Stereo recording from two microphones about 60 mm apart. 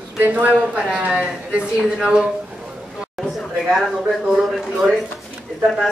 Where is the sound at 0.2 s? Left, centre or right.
Right.